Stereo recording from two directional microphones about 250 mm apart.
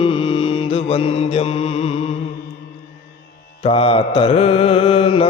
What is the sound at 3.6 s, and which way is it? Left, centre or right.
Mantra, left.